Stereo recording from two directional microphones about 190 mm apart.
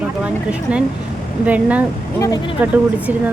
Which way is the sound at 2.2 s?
20° left (ahead or behind).